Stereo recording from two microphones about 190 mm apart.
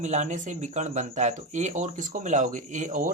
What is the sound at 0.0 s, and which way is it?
Speech, 40° right (ahead or behind).